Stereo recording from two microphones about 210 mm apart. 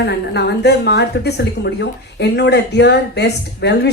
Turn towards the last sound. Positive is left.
turn(degrees=50)  # may be behind; listen again after turning